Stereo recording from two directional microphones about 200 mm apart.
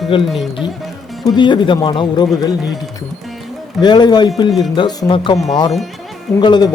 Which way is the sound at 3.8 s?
20° left (ahead or behind).